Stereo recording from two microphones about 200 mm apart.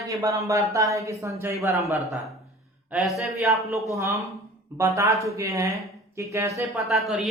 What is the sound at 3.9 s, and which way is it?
Speech, 15° right (ahead or behind).